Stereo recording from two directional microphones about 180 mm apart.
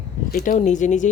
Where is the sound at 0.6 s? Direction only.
40° left (ahead or behind).